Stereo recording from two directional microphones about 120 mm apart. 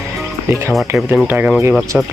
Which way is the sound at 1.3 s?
15° right (ahead or behind).